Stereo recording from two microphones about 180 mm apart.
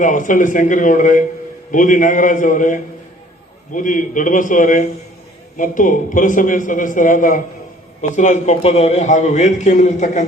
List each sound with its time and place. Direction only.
0.0 s a man's voice: 45° left (ahead or behind)